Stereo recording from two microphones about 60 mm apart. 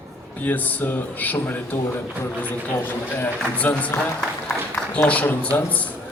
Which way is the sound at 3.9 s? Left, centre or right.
Left.